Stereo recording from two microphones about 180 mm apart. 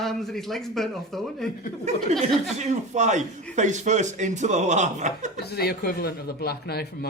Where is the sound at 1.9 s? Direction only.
40° right (ahead or behind).